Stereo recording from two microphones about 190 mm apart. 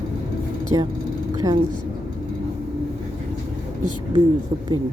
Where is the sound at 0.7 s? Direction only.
25° right (ahead or behind).